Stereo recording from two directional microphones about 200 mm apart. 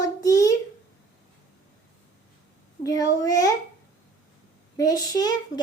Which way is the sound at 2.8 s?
20° left (ahead or behind).